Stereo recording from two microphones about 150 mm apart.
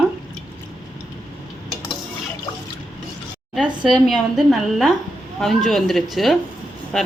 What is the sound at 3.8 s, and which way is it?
A woman's voice, centre (ahead or behind).